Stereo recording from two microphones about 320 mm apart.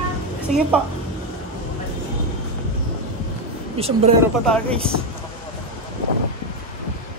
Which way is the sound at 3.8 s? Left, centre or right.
Centre.